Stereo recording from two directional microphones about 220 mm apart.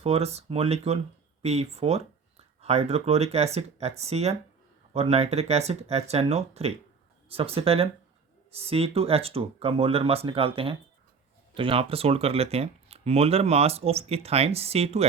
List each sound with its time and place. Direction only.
0.0 s speech: 30° right (ahead or behind)